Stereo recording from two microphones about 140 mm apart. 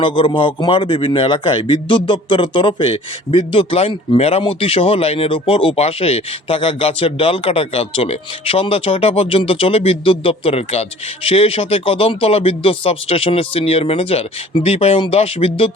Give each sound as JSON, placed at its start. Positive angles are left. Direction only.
{"t": 0.0, "sound": "a man's voice", "side_deg": 35}